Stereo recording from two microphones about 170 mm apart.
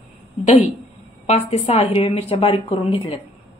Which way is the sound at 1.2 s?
40° left (ahead or behind).